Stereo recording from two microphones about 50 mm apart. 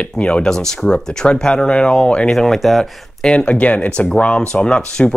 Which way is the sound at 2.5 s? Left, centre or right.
Centre.